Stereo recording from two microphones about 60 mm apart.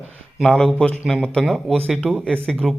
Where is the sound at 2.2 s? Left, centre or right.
Centre.